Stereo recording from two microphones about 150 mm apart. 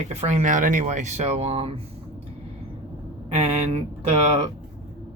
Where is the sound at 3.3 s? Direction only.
45° right (ahead or behind).